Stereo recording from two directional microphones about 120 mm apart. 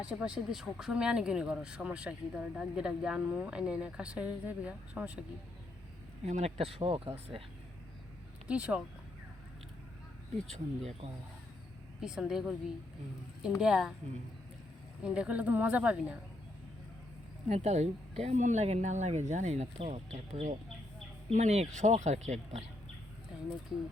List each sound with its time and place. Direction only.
0.0 s speech: 10° right (ahead or behind)
6.2 s speech: 65° right (ahead or behind); by 7.1 s 50° right (ahead or behind)
8.4 s speech: 10° right (ahead or behind)
10.5 s speech: 60° right (ahead or behind)
11.9 s speech: 5° right (ahead or behind)
13.6 s speech: 5° right (ahead or behind)
15.0 s speech: 10° right (ahead or behind)
17.5 s speech: 65° right (ahead or behind)
20.1 s speech: 80° right
21.2 s speech: 65° right (ahead or behind)